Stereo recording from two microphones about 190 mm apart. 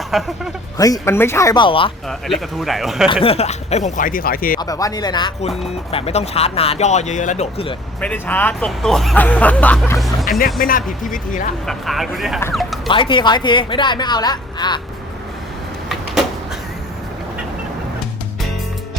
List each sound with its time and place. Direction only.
0.1 s speech: centre (ahead or behind)
0.8 s speech: 15° left (ahead or behind)
2.0 s speech: centre (ahead or behind)
3.1 s speech: 30° left (ahead or behind); by 4.6 s 50° left (ahead or behind)
4.6 s a woman's voice: 20° left (ahead or behind)
5.4 s speech: 30° left (ahead or behind)
8.0 s speech: 10° left (ahead or behind)
10.6 s speech: 45° left (ahead or behind)
11.6 s speech: centre (ahead or behind)
12.9 s a woman's voice: 25° left (ahead or behind)